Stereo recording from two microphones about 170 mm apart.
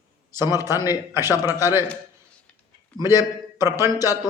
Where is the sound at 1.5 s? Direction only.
15° right (ahead or behind).